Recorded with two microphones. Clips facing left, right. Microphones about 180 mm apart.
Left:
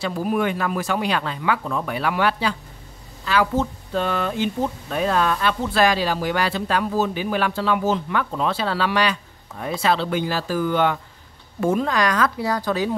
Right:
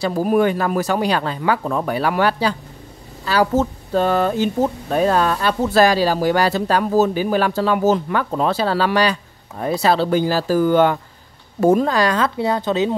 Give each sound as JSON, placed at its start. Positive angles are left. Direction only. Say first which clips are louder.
{"t": 0.0, "sound": "speech", "louder": "right 6 dB", "side_deg": -45}